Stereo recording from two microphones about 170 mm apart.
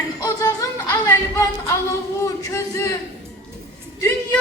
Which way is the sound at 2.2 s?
20° left (ahead or behind).